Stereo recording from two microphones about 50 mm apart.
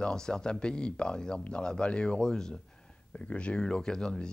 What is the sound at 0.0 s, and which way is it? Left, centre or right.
Speech, centre.